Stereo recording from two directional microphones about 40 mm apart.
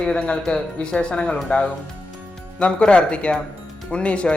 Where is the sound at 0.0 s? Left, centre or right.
Left.